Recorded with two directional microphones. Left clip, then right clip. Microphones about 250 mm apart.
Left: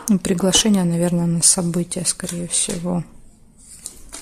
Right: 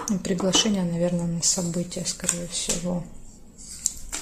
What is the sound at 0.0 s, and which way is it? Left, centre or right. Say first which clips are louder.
Speech: left 6 dB; left.